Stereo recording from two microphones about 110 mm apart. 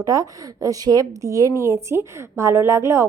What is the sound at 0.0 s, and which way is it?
A woman's voice, 30° right (ahead or behind).